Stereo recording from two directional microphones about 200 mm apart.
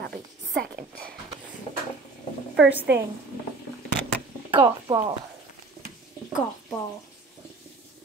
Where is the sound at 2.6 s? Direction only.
10° right (ahead or behind).